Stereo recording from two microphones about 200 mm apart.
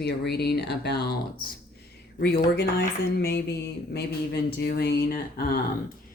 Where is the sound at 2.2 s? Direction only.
55° left (ahead or behind).